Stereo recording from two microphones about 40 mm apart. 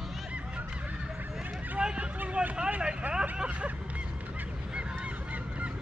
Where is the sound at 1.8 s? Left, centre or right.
Right.